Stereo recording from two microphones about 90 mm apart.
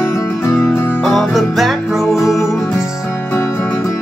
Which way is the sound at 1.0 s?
5° left (ahead or behind).